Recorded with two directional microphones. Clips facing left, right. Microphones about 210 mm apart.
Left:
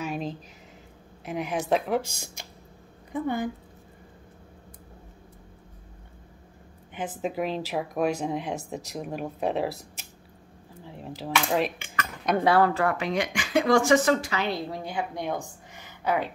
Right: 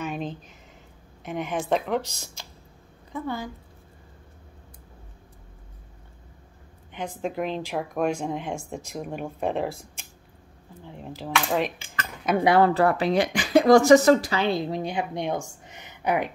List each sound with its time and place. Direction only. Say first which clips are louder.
0.0 s a sound: even; centre (ahead or behind)
1.2 s speech: even; centre (ahead or behind)
3.1 s a woman's voice: left 3 dB; 15° left (ahead or behind)
6.9 s speech: even; 5° left (ahead or behind)
12.5 s speech: right 3 dB; 30° right (ahead or behind)
15.7 s a sound: right 2 dB; 20° right (ahead or behind)